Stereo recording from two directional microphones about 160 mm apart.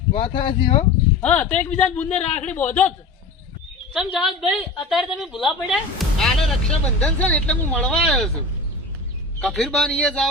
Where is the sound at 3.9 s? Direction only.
Centre (ahead or behind).